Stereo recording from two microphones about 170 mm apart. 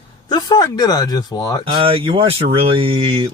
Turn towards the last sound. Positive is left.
turn(degrees=-30)  # may be behind; listen again after turning